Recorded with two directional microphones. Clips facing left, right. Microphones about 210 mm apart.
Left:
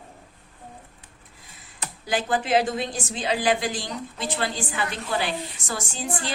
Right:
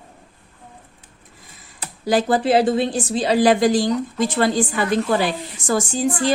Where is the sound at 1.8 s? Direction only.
35° right (ahead or behind).